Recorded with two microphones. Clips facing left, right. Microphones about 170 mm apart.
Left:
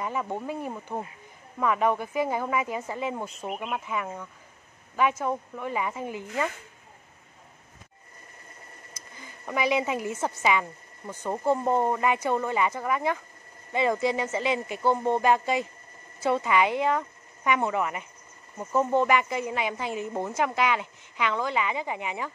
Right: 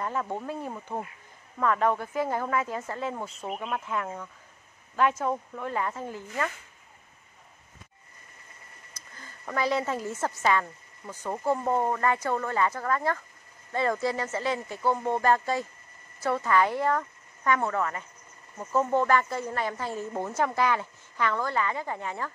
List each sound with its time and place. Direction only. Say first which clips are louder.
0.0 s speech: left 1 dB; 10° left (ahead or behind)
8.9 s a woman's voice: left 1 dB; 15° left (ahead or behind)